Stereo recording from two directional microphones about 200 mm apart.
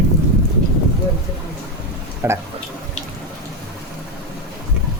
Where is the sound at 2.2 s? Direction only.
10° right (ahead or behind).